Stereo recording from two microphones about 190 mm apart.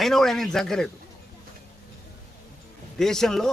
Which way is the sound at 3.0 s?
Centre (ahead or behind).